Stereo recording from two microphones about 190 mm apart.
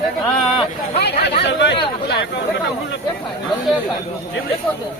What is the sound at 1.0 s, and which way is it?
Chatter, 60° left (ahead or behind).